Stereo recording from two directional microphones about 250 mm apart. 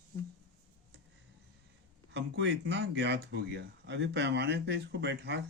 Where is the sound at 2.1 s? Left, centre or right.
Right.